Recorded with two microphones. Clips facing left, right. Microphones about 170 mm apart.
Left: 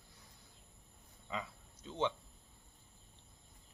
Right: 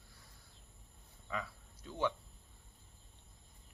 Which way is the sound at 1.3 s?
20° left (ahead or behind).